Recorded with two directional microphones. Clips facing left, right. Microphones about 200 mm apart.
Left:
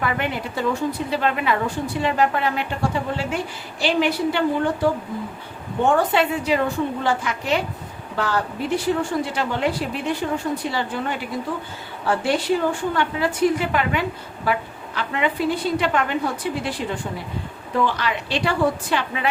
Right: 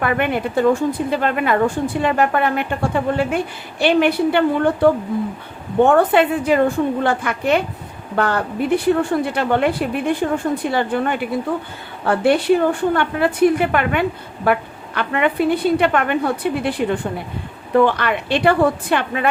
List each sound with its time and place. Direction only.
0.0 s a woman's voice: 55° right (ahead or behind)